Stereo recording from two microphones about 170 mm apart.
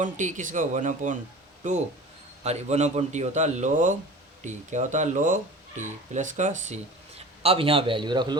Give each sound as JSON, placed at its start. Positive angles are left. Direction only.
{"t": 0.0, "sound": "speech", "side_deg": -45}
{"t": 2.4, "sound": "speech", "side_deg": -40}
{"t": 7.2, "sound": "a man's voice", "side_deg": -35}